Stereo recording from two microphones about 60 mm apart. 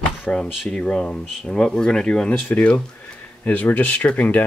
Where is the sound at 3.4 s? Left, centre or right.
Left.